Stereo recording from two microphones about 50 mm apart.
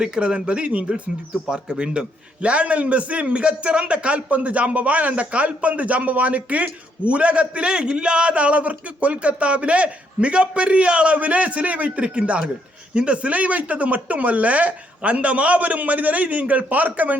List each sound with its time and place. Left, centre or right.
0.0 s a man's voice: centre; by 17.2 s right